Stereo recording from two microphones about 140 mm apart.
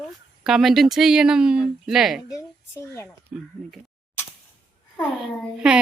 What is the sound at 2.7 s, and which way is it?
Speech, 20° left (ahead or behind).